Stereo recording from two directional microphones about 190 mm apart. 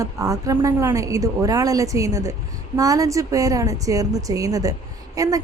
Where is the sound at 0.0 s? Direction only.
15° right (ahead or behind).